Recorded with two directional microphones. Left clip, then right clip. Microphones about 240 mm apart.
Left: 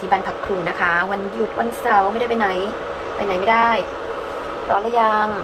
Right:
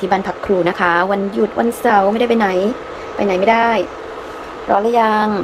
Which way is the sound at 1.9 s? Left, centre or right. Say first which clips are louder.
Right 3 dB; right.